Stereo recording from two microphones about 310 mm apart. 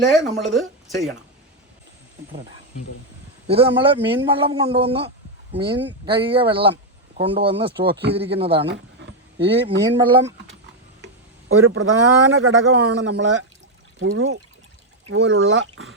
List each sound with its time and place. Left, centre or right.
0.1 s speech: centre
3.4 s a man's voice: centre
8.6 s a sound: right
9.6 s a man's voice: centre
11.4 s a man's voice: right